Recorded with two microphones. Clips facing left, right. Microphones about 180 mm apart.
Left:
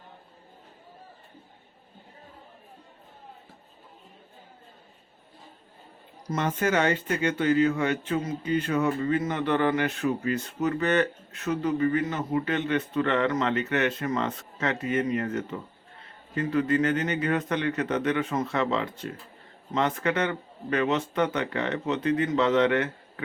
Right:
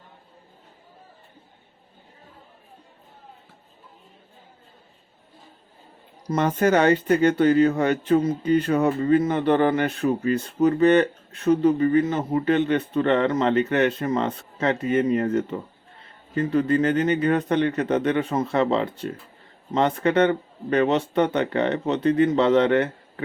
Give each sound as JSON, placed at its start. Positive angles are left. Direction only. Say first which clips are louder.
{"t": 6.3, "sound": "speech", "louder": "right 6 dB", "side_deg": -35}